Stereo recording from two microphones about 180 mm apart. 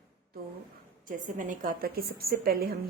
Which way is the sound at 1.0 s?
45° right (ahead or behind).